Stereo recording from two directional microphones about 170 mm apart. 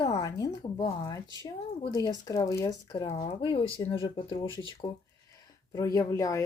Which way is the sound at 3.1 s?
35° left (ahead or behind).